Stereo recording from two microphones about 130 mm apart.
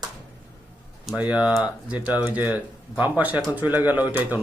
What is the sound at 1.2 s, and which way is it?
Speech, 5° right (ahead or behind).